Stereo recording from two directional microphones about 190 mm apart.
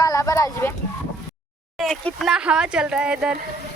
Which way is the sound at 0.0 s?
15° left (ahead or behind).